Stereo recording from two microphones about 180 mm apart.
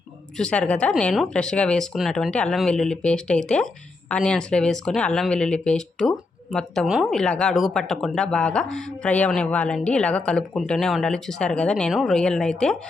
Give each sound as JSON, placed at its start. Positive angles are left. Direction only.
{"t": 0.3, "sound": "speech", "side_deg": 5}